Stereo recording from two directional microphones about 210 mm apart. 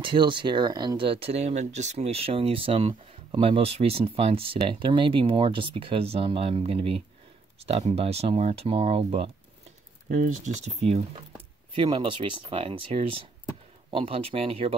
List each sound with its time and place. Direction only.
0.0 s speech: 25° right (ahead or behind)
10.0 s speech: 35° right (ahead or behind)